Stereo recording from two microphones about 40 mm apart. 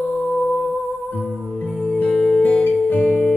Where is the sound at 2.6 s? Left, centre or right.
Left.